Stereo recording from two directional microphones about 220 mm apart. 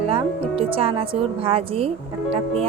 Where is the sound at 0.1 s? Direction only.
25° right (ahead or behind).